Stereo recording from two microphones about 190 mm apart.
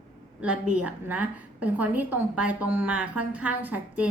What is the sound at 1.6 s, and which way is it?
A woman's voice, 10° right (ahead or behind).